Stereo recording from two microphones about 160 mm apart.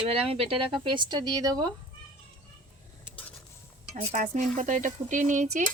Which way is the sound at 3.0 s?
10° left (ahead or behind).